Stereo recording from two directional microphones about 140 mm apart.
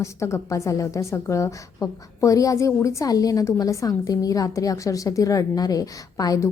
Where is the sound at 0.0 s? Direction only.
20° left (ahead or behind).